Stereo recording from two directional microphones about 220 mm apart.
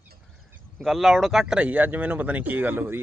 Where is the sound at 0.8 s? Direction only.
Centre (ahead or behind).